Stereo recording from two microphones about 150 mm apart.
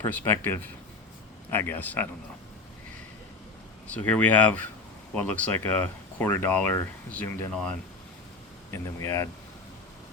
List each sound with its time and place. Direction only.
0.0 s speech: 10° left (ahead or behind)
3.9 s speech: 10° left (ahead or behind)
8.7 s speech: 20° left (ahead or behind)